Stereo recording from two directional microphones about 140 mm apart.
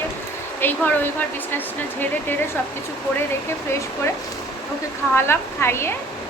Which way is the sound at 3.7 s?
20° left (ahead or behind).